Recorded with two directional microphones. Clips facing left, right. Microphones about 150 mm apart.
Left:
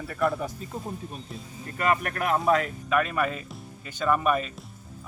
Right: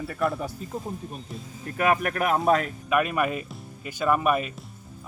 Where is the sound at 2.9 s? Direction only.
15° right (ahead or behind).